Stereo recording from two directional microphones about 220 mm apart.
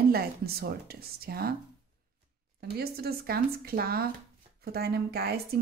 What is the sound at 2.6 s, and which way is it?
Speech, 45° right (ahead or behind).